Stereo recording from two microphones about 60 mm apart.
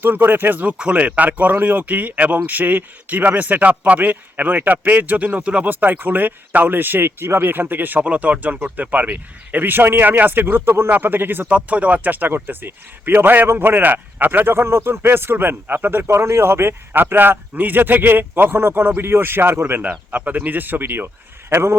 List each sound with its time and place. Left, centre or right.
0.0 s speech: right
5.6 s speech: right
11.5 s speech: right
19.9 s speech: right
21.5 s a man's voice: right